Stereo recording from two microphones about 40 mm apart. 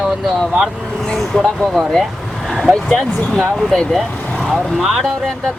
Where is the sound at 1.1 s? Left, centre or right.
Centre.